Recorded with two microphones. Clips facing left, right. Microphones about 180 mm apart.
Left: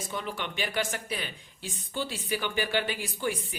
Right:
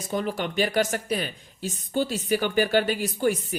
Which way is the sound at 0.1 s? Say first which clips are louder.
Right 10 dB; 40° right (ahead or behind).